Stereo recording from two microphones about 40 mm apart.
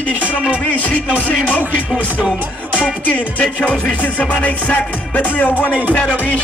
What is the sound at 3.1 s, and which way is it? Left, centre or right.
Music, left.